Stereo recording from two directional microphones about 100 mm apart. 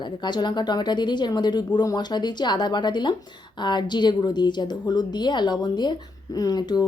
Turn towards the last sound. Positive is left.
turn(degrees=40)  # may be behind; listen again after turning